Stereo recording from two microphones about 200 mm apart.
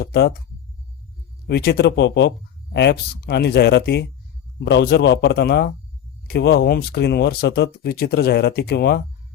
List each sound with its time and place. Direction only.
0.0 s speech: 50° left (ahead or behind)
1.5 s speech: 55° left (ahead or behind)